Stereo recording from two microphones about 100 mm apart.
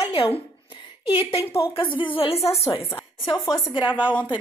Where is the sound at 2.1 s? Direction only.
75° left (ahead or behind).